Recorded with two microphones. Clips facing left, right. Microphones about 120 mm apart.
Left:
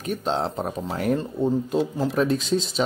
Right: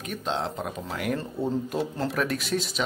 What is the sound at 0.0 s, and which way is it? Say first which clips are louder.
Speech: left 5 dB; 35° left (ahead or behind).